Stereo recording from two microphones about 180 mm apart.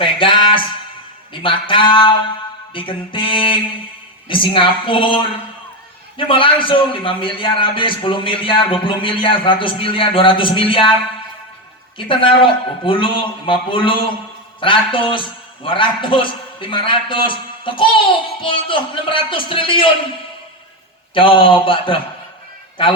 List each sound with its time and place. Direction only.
0.0 s a sound: 30° left (ahead or behind)
1.3 s a man's voice: 30° left (ahead or behind)
11.9 s a man's voice: 30° left (ahead or behind)
21.2 s a man's voice: 30° left (ahead or behind)